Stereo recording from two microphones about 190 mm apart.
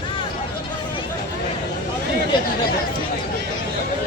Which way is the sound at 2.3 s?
25° left (ahead or behind).